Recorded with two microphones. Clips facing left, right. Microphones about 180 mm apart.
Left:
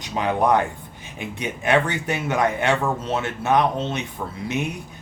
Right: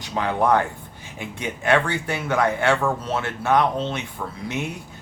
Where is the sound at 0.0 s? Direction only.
15° left (ahead or behind).